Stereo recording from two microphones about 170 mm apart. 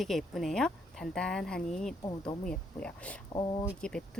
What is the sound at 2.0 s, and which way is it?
Speech, 20° left (ahead or behind).